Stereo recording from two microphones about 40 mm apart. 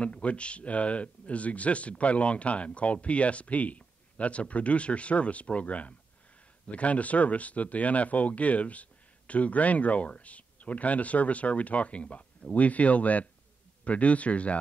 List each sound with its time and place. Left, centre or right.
0.0 s speech: left